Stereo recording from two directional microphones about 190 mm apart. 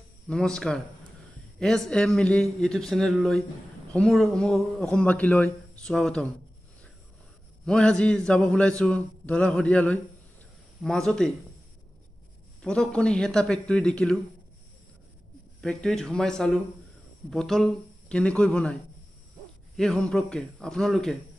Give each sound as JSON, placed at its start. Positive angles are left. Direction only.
{"t": 0.3, "sound": "speech", "side_deg": 5}
{"t": 7.6, "sound": "speech", "side_deg": 5}
{"t": 12.6, "sound": "speech", "side_deg": 5}
{"t": 15.6, "sound": "speech", "side_deg": 5}
{"t": 19.8, "sound": "speech", "side_deg": 5}